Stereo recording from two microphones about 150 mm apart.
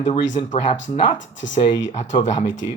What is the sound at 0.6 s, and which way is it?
Speech, 35° left (ahead or behind).